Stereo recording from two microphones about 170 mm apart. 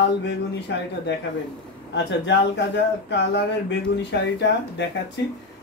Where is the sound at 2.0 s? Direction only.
90° left.